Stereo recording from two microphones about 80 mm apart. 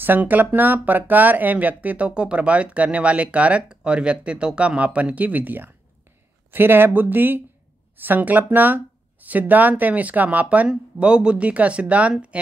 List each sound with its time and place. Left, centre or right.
0.0 s speech: right